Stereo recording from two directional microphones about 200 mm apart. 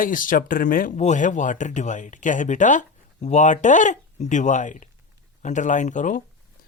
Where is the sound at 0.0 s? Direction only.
45° left (ahead or behind).